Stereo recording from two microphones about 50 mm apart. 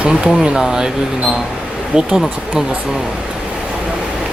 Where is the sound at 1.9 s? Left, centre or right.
Centre.